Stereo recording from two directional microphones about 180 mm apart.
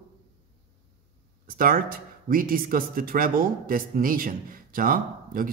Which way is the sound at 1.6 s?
50° right (ahead or behind).